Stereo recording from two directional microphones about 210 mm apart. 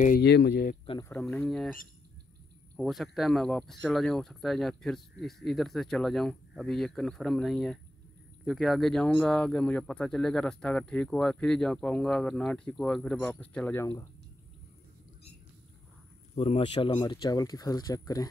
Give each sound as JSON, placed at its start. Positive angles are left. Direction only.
{"t": 0.0, "sound": "speech", "side_deg": 45}
{"t": 1.2, "sound": "speech", "side_deg": 5}
{"t": 16.3, "sound": "speech", "side_deg": 25}